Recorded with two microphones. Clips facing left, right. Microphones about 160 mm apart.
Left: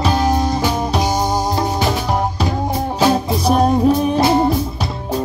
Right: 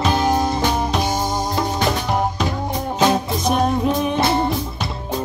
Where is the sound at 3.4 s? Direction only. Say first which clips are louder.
Left 6 dB; 35° left (ahead or behind).